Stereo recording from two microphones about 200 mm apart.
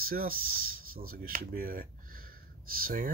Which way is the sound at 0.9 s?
45° right (ahead or behind).